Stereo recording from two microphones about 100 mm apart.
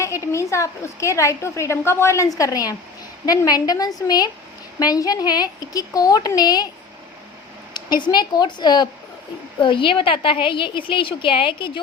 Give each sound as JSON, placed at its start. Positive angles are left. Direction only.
{"t": 0.0, "sound": "a woman's voice", "side_deg": 30}
{"t": 7.7, "sound": "a woman's voice", "side_deg": 50}